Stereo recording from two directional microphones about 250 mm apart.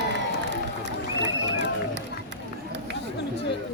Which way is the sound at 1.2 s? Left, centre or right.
Right.